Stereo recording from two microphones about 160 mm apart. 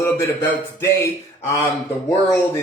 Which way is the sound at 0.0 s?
15° left (ahead or behind).